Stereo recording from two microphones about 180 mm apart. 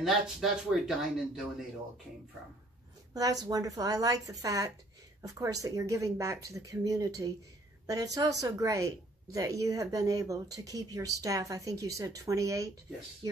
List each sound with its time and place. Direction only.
0.0 s speech: centre (ahead or behind)
3.1 s speech: 20° right (ahead or behind)